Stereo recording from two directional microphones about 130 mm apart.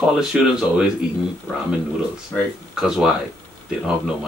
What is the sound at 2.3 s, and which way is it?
Speech, 5° right (ahead or behind).